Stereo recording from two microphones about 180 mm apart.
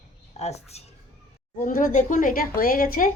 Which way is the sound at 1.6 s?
50° left (ahead or behind).